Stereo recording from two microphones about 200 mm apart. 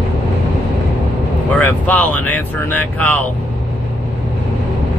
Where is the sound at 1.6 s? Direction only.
10° left (ahead or behind).